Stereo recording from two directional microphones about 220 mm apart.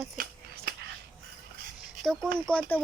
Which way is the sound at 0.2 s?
45° right (ahead or behind).